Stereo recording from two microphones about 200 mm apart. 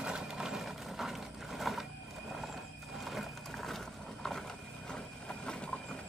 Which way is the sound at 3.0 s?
Centre (ahead or behind).